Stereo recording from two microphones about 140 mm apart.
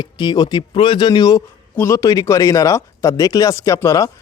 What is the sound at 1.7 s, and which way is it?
Speech, 15° left (ahead or behind).